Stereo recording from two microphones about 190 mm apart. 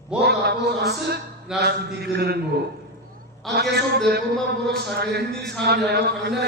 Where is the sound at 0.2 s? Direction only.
60° right (ahead or behind).